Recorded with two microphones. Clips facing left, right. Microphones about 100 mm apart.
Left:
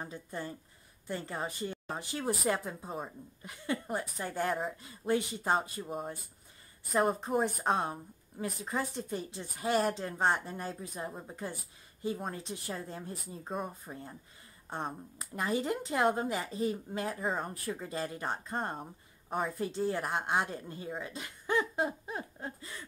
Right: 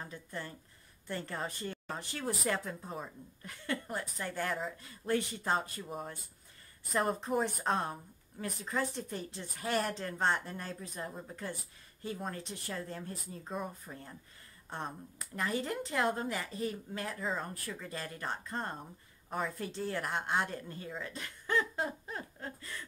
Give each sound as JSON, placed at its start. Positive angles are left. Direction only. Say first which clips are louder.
{"t": 0.0, "sound": "speech", "louder": "left 3 dB", "side_deg": 20}
{"t": 15.1, "sound": "speech", "louder": "left 2 dB", "side_deg": 20}
{"t": 17.2, "sound": "speech", "louder": "left 1 dB", "side_deg": 45}
{"t": 17.6, "sound": "speech", "louder": "left 5 dB", "side_deg": 25}